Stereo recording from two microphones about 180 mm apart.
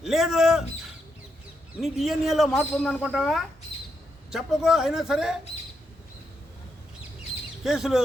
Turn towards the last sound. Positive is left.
turn(degrees=0)  # may be behind; listen again after turning